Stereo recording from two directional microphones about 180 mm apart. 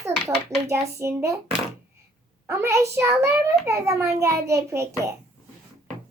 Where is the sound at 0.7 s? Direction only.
15° right (ahead or behind).